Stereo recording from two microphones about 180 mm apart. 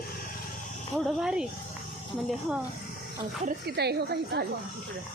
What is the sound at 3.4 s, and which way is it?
A woman's voice, 60° right (ahead or behind).